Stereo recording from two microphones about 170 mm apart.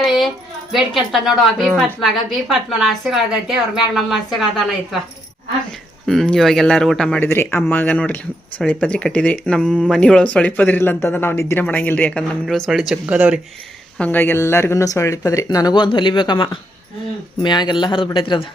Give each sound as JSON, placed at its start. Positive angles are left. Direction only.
{"t": 0.0, "sound": "a sound", "side_deg": 0}
{"t": 0.7, "sound": "a woman's voice", "side_deg": 0}
{"t": 6.1, "sound": "a woman's voice", "side_deg": 0}
{"t": 14.0, "sound": "speech", "side_deg": 10}